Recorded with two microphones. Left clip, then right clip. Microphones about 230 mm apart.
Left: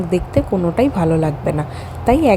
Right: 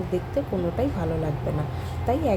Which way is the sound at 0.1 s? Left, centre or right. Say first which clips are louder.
Left 10 dB; left.